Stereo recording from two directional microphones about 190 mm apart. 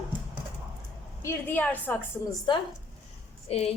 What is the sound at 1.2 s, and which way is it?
Speech, 10° left (ahead or behind).